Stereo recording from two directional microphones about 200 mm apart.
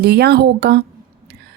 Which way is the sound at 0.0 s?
55° right (ahead or behind).